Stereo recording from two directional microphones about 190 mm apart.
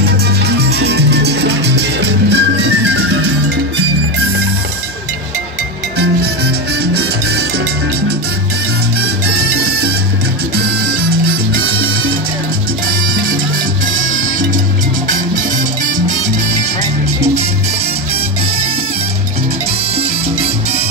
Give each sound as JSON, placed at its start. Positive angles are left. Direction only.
{"t": 0.6, "sound": "music", "side_deg": -60}
{"t": 6.8, "sound": "salsa music", "side_deg": -60}
{"t": 9.0, "sound": "music", "side_deg": -60}
{"t": 12.8, "sound": "salsa music", "side_deg": -50}
{"t": 13.9, "sound": "music", "side_deg": -45}
{"t": 15.3, "sound": "music", "side_deg": -45}